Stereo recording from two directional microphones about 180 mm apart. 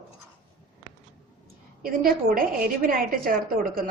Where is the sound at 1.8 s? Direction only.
55° right (ahead or behind).